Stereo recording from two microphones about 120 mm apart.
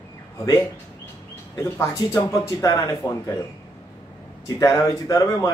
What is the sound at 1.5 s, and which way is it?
Speech, 25° left (ahead or behind).